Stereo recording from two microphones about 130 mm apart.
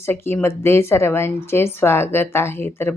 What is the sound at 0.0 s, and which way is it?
Speech, 15° left (ahead or behind).